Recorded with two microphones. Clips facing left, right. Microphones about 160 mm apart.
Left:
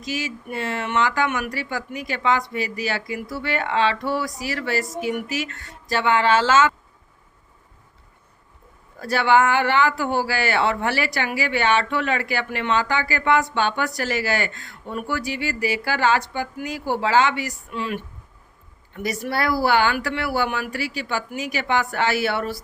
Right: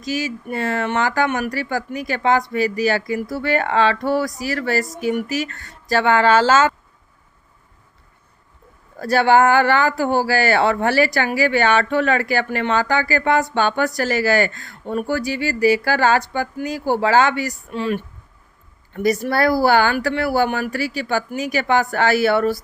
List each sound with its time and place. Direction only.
0.0 s a man's voice: 40° right (ahead or behind)
9.0 s a man's voice: 40° right (ahead or behind)